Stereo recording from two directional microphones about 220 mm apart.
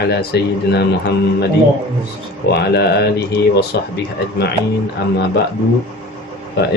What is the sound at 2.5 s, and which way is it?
Speech, 45° left (ahead or behind).